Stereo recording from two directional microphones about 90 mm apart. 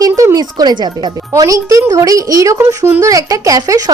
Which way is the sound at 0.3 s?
50° right (ahead or behind).